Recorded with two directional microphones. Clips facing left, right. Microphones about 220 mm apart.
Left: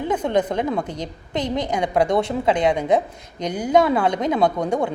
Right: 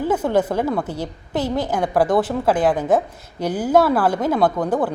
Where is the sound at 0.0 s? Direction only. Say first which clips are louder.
Right 2 dB; 5° right (ahead or behind).